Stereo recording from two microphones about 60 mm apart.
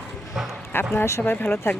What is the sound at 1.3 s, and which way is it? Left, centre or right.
Speech, left.